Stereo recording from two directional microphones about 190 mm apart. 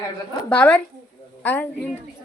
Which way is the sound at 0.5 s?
5° left (ahead or behind).